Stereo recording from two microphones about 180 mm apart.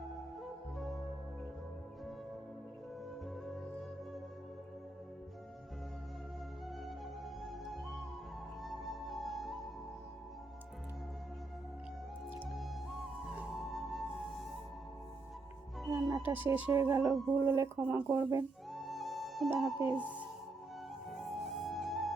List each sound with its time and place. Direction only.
0.4 s music: centre (ahead or behind)
7.4 s music: centre (ahead or behind)
12.5 s music: centre (ahead or behind)
15.8 s speech: centre (ahead or behind); by 18.4 s 15° right (ahead or behind)
18.7 s music: centre (ahead or behind)
21.1 s music: centre (ahead or behind)